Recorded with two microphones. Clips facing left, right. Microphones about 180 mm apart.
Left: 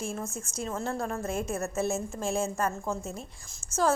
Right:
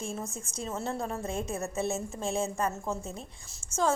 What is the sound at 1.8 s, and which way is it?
A woman's voice, centre (ahead or behind).